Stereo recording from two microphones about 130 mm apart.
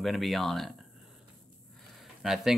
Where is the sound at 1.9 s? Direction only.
5° right (ahead or behind).